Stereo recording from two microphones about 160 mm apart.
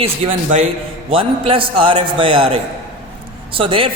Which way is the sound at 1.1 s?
35° right (ahead or behind).